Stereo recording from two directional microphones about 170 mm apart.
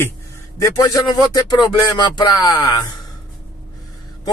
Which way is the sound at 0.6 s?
20° left (ahead or behind).